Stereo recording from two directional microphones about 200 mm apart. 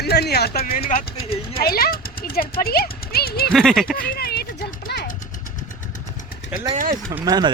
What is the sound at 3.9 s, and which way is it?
Speech, 45° left (ahead or behind).